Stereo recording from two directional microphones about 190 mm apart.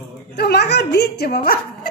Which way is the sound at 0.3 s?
60° left (ahead or behind).